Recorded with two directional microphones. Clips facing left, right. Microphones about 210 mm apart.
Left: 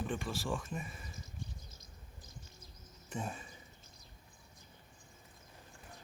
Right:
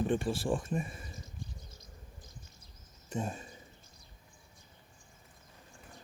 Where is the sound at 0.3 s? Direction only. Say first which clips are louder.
Right 6 dB; 30° right (ahead or behind).